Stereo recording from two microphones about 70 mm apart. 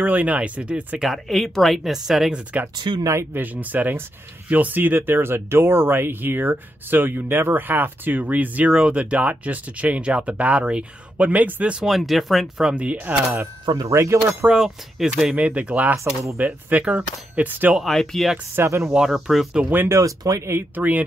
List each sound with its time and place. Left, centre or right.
0.0 s speech: right
1.0 s speech: centre
3.3 s speech: right
11.8 s speech: centre
12.6 s speech: centre
13.8 s speech: right
14.5 s speech: centre; by 17.7 s right
17.8 s speech: centre
18.6 s speech: right
18.9 s speech: centre
19.9 s speech: right
20.7 s speech: right